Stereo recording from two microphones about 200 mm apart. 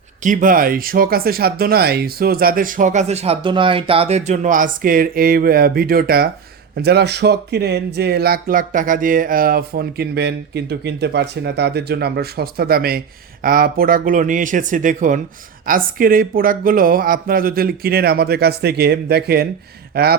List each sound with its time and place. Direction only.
0.2 s speech: 40° right (ahead or behind)